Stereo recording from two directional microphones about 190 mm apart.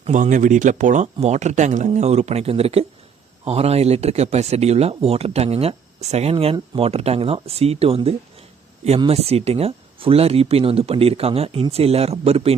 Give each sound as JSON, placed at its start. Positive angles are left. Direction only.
{"t": 0.0, "sound": "speech", "side_deg": -40}